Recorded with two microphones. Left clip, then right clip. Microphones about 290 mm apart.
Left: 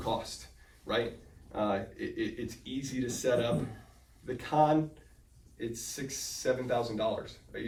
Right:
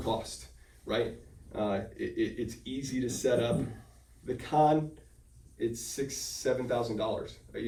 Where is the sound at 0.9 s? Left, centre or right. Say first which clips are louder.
Even; centre.